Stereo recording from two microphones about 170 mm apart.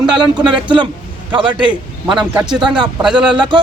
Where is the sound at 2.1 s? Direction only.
5° right (ahead or behind).